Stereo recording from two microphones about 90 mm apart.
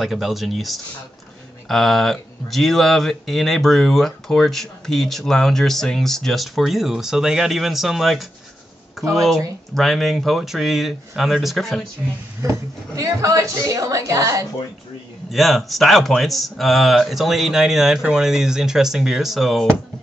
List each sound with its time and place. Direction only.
0.0 s speech: centre (ahead or behind)
9.0 s a sound: centre (ahead or behind)
9.8 s speech: centre (ahead or behind)
12.4 s a woman's voice: 35° right (ahead or behind)
15.3 s speech: centre (ahead or behind)